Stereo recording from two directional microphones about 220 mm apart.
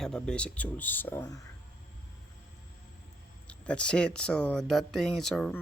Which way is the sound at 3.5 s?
5° left (ahead or behind).